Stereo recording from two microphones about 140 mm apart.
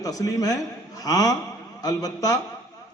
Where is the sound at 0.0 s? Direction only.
25° left (ahead or behind).